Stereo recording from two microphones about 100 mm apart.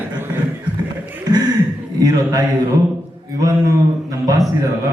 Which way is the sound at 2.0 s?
40° right (ahead or behind).